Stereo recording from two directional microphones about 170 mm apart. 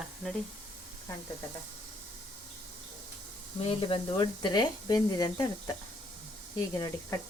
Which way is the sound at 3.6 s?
30° left (ahead or behind).